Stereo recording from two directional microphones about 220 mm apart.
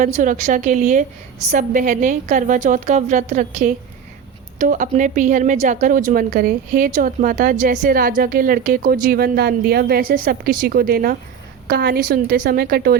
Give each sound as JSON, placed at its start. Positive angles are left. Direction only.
{"t": 0.0, "sound": "a woman's voice", "side_deg": -35}